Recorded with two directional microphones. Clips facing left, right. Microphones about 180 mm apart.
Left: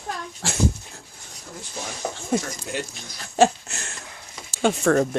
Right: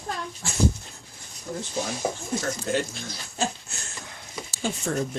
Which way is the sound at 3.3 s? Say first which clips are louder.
Left 12 dB; 85° left.